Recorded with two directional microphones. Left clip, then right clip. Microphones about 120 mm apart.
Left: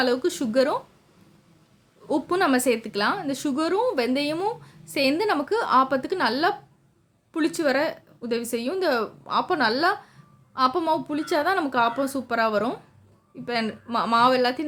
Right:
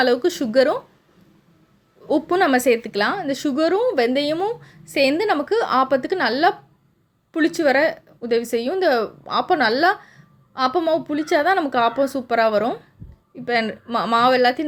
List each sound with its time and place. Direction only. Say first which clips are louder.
0.0 s a woman's voice: right 5 dB; 20° right (ahead or behind)
2.0 s a woman's voice: right 5 dB; 20° right (ahead or behind)